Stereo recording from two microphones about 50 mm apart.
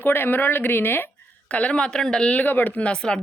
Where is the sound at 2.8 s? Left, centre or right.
Centre.